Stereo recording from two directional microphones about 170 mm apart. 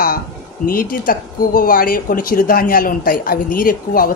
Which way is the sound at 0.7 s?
55° left (ahead or behind).